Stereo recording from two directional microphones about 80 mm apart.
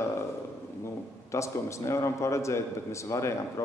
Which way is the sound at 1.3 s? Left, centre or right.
Left.